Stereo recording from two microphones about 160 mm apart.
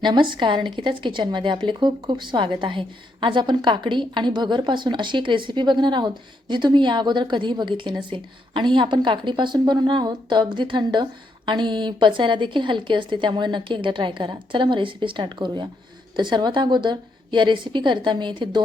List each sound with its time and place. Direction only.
0.0 s speech: 30° right (ahead or behind)